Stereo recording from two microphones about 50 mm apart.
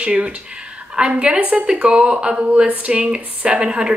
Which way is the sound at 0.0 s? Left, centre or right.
Right.